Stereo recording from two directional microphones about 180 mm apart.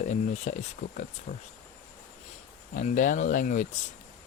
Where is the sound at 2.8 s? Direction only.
45° left (ahead or behind).